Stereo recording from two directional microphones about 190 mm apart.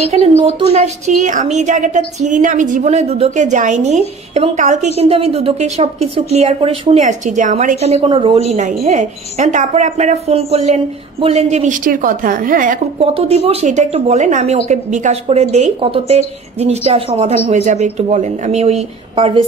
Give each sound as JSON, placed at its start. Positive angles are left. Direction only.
{"t": 0.1, "sound": "a woman's voice", "side_deg": -40}
{"t": 13.0, "sound": "a woman's voice", "side_deg": -30}